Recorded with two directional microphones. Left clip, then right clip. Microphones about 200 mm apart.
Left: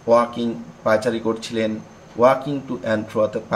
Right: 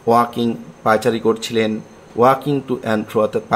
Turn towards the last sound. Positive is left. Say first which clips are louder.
# right 3 dB
turn(degrees=-55)  # may be behind; listen again after turning